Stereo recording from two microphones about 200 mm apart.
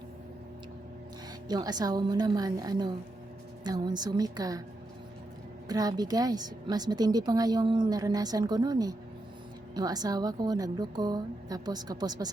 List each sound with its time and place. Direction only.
1.5 s a woman's voice: 20° right (ahead or behind)
5.6 s a woman's voice: 20° right (ahead or behind)